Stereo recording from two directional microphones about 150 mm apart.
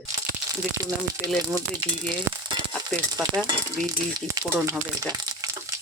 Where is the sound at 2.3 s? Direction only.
20° right (ahead or behind).